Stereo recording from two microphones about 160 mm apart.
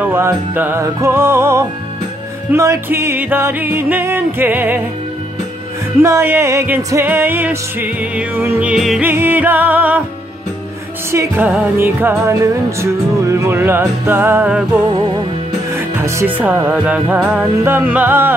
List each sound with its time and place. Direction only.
0.0 s music: 15° right (ahead or behind)
6.0 s music: 15° right (ahead or behind)
11.1 s music: 15° right (ahead or behind)
15.7 s music: 15° right (ahead or behind)